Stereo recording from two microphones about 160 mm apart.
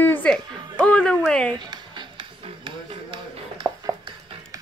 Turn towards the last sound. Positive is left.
turn(degrees=-25)  # may be behind; listen again after turning